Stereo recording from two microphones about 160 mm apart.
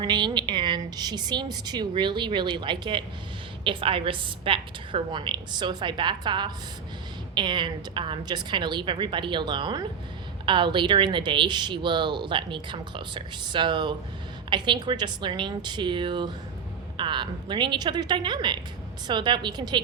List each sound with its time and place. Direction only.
0.0 s a woman's voice: 25° right (ahead or behind)